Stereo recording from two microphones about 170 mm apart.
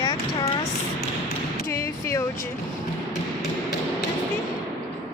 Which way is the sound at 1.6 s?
15° left (ahead or behind).